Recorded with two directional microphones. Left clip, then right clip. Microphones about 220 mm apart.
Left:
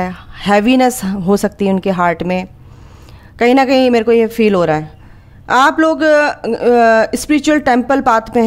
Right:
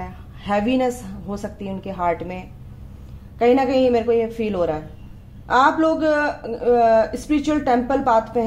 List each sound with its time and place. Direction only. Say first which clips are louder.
0.0 s a man's voice: left 13 dB; 45° left (ahead or behind)